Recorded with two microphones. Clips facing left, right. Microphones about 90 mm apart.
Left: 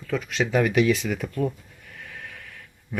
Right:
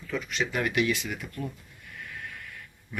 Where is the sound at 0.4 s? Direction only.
55° left (ahead or behind).